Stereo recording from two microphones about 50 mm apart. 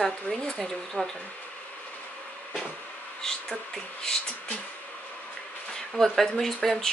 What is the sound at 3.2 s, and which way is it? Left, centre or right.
Speech, centre.